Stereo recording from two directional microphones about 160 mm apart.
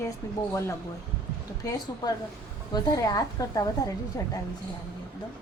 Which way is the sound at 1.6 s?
25° left (ahead or behind).